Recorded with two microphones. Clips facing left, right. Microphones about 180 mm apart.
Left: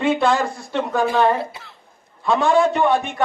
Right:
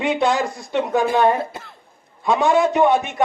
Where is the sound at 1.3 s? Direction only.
50° right (ahead or behind).